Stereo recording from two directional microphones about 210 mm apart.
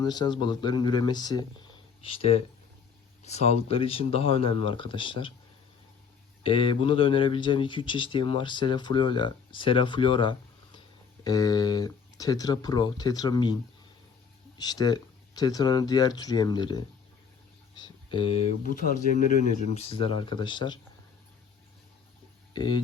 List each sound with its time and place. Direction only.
0.0 s speech: 20° left (ahead or behind)
6.4 s speech: 25° left (ahead or behind)
14.6 s speech: 20° left (ahead or behind)
17.7 s a sound: 20° left (ahead or behind)
18.7 s speech: 40° left (ahead or behind); by 20.7 s 20° left (ahead or behind)
22.5 s speech: 20° left (ahead or behind)